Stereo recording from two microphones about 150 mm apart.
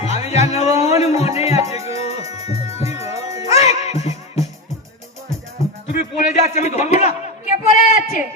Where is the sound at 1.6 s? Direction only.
20° right (ahead or behind).